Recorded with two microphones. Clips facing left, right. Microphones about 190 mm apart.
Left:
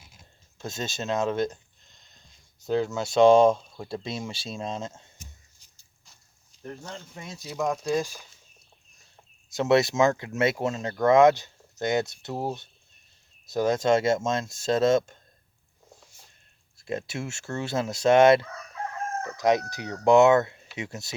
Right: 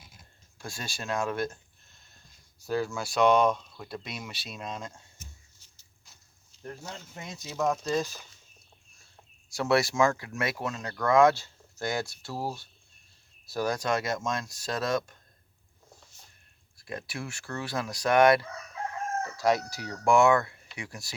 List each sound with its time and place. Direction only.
0.6 s speech: 20° left (ahead or behind)
6.8 s speech: 5° right (ahead or behind)
7.7 s speech: 10° left (ahead or behind)
9.5 s speech: 20° left (ahead or behind)
16.7 s speech: 25° left (ahead or behind)